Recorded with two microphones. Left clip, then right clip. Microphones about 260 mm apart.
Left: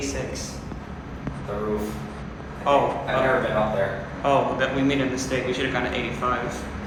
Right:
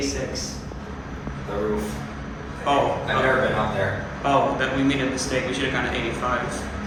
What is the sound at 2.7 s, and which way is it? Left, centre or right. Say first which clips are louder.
Speech: left 1 dB; centre.